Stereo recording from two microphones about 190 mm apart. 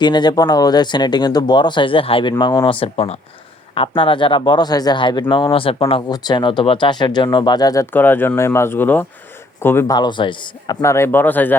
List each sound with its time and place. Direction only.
0.0 s a man's voice: 25° left (ahead or behind)